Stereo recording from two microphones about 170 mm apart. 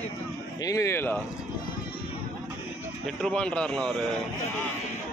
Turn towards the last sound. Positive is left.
turn(degrees=5)  # may be behind; listen again after turning